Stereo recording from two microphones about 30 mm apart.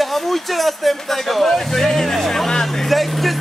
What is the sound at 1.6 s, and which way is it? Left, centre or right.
Vehicle, centre.